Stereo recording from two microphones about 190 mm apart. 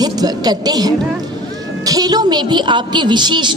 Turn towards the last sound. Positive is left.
turn(degrees=-25)  # may be behind; listen again after turning